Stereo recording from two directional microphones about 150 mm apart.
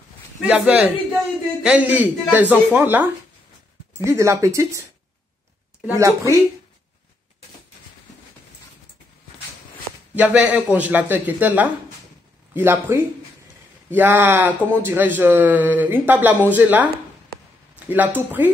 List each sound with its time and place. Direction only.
0.4 s speech: 10° right (ahead or behind)
5.9 s speech: 20° right (ahead or behind)
10.1 s speech: 10° right (ahead or behind)